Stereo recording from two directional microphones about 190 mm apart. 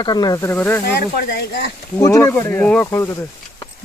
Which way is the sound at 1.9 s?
15° left (ahead or behind).